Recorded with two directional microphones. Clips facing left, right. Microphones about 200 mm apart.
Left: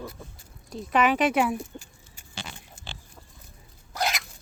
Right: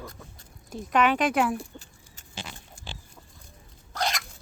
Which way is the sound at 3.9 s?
5° left (ahead or behind).